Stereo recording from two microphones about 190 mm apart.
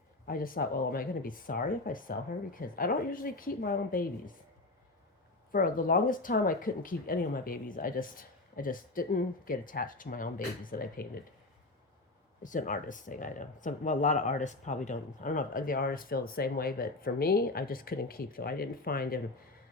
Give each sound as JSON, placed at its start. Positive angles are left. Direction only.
{"t": 0.3, "sound": "speech", "side_deg": 50}
{"t": 5.5, "sound": "speech", "side_deg": 45}
{"t": 12.4, "sound": "speech", "side_deg": 45}